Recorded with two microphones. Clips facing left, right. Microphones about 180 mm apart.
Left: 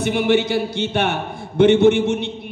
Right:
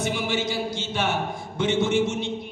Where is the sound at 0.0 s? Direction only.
60° left (ahead or behind).